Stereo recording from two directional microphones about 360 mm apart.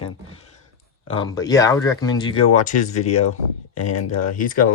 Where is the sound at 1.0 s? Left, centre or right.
Centre.